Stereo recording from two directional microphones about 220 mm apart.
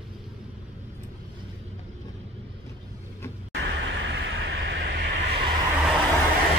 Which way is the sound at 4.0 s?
55° right (ahead or behind).